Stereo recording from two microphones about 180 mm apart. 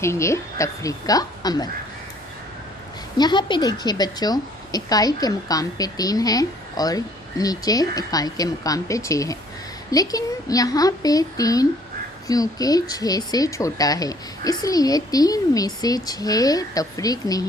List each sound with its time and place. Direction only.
0.0 s a woman's voice: 15° left (ahead or behind)
3.2 s a woman's voice: 25° left (ahead or behind)